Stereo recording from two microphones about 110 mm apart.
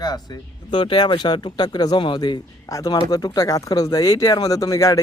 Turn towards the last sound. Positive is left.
turn(degrees=30)  # may be behind; listen again after turning